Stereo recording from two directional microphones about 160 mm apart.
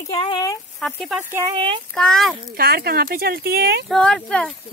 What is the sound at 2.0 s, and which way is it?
Speech, 5° left (ahead or behind).